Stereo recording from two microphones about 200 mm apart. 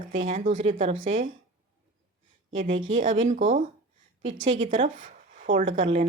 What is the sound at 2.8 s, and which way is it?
Speech, 75° right (ahead or behind).